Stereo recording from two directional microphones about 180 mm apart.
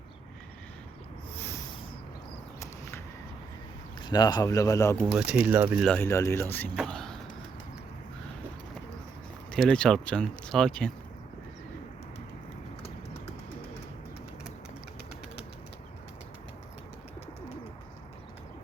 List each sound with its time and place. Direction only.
2.6 s a sound: 15° left (ahead or behind)
4.0 s speech: 25° left (ahead or behind)
5.1 s speech: 5° right (ahead or behind)
5.8 s speech: 10° left (ahead or behind)
6.7 s vehicle: 5° left (ahead or behind)
9.5 s speech: 5° left (ahead or behind)